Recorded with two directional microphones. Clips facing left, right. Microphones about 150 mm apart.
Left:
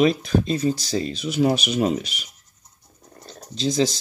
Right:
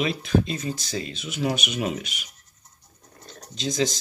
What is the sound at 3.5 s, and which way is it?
Speech, 30° left (ahead or behind).